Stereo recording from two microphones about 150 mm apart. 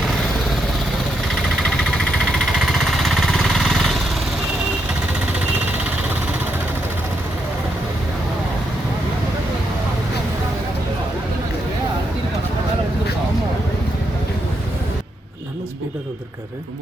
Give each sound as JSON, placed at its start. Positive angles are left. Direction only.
{"t": 2.6, "sound": "vehicle", "side_deg": 0}